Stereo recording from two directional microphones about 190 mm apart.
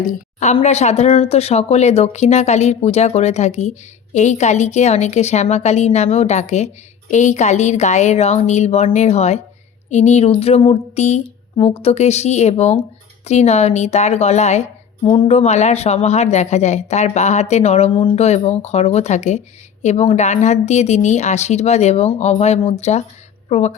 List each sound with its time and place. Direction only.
0.0 s a woman's voice: 40° left (ahead or behind)